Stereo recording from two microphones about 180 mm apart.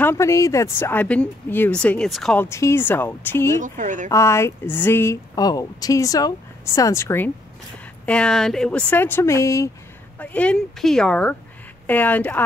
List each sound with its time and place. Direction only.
0.0 s speech: 15° left (ahead or behind)
2.5 s speech: 15° left (ahead or behind)
3.5 s speech: 45° right (ahead or behind)
4.1 s speech: 15° left (ahead or behind)